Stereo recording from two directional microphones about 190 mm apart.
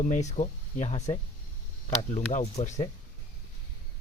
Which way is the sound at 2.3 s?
40° left (ahead or behind).